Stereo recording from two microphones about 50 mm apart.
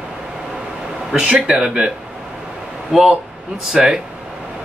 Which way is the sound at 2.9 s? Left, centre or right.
Centre.